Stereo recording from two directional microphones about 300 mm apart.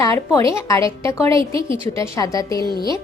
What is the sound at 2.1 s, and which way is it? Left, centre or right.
Speech, centre.